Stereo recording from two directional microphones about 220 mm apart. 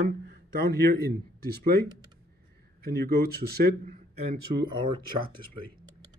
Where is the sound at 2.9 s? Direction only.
45° right (ahead or behind).